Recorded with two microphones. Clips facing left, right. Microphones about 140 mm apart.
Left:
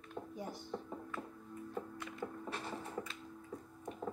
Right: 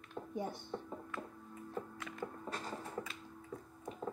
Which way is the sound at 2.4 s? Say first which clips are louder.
Even; 40° right (ahead or behind).